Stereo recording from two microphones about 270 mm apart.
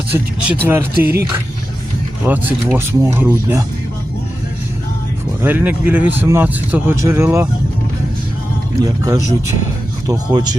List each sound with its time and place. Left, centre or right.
0.1 s speech: centre
1.0 s speech: right
2.2 s speech: centre
5.4 s speech: centre
8.8 s speech: centre